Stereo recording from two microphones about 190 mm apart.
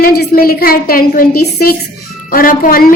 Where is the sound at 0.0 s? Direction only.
50° left (ahead or behind).